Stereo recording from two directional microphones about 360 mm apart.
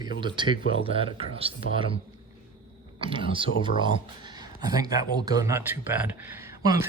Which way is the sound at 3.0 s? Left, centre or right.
Centre.